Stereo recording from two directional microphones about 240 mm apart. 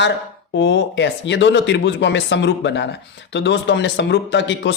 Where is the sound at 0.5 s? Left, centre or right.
Left.